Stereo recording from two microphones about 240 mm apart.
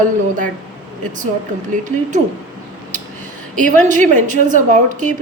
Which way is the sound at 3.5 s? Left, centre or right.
Right.